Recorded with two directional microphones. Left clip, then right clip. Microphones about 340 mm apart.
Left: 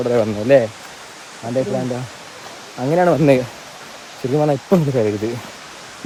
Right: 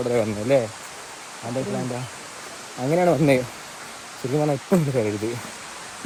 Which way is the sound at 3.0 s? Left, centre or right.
Centre.